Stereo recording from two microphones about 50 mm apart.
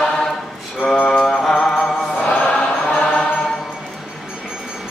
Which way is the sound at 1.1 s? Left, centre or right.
Centre.